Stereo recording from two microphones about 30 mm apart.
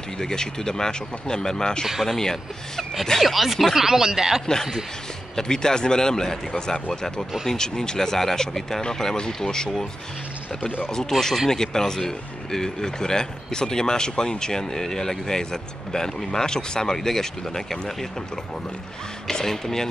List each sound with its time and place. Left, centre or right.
0.2 s speech: centre
3.2 s speech: centre
3.7 s speech: centre
5.3 s speech: left
9.1 s speech: left
11.1 s speech: centre
19.3 s speech: centre